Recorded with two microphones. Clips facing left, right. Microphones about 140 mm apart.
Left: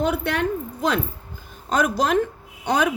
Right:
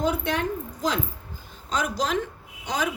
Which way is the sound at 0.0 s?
65° left (ahead or behind).